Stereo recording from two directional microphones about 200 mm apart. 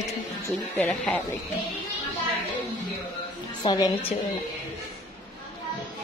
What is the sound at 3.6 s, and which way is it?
Speech, 25° left (ahead or behind).